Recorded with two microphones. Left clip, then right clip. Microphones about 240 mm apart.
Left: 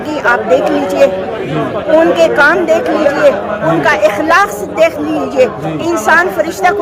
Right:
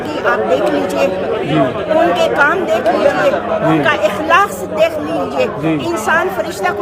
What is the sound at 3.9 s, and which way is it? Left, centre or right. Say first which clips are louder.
A man's voice: left 3 dB; centre.